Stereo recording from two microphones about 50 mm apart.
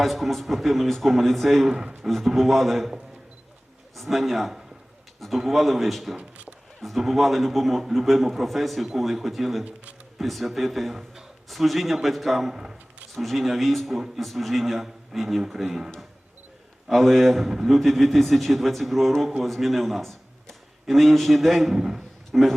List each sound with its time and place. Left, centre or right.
0.0 s a man's voice: centre
6.1 s a sound: right
6.8 s a man's voice: centre
16.9 s a man's voice: centre
22.3 s a man's voice: centre